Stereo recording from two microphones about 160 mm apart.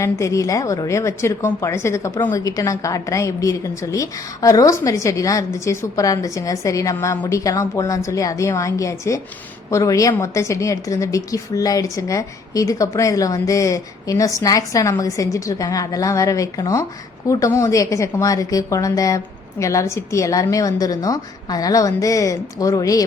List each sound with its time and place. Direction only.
0.0 s a woman's voice: 20° left (ahead or behind)